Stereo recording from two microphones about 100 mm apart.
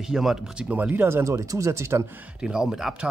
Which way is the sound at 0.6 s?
15° right (ahead or behind).